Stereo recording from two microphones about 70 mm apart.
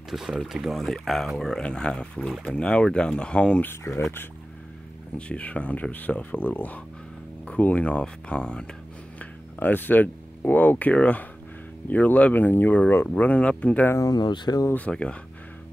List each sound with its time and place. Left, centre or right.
0.1 s speech: centre
3.6 s speech: left
5.1 s speech: centre
9.2 s speech: left
14.1 s speech: left
14.9 s speech: centre